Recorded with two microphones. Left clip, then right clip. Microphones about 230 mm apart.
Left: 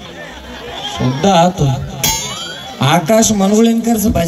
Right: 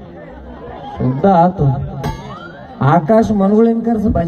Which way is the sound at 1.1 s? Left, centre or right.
Left.